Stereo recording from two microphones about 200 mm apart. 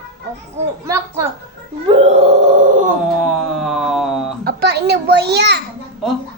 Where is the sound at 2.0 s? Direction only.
35° right (ahead or behind).